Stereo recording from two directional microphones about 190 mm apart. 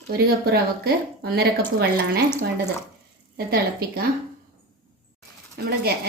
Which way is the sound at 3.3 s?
55° right (ahead or behind).